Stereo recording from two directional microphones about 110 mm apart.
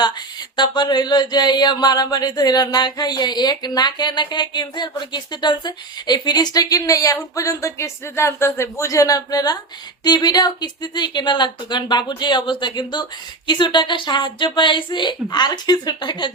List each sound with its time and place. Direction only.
0.0 s mantra: 40° left (ahead or behind)
10.0 s speech: 40° left (ahead or behind)